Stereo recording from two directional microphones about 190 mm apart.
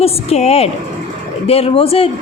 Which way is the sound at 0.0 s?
35° left (ahead or behind).